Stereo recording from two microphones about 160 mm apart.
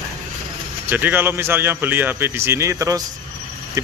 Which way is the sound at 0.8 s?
10° right (ahead or behind).